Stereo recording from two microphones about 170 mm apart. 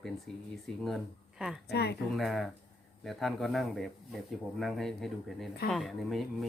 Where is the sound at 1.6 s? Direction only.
70° left (ahead or behind).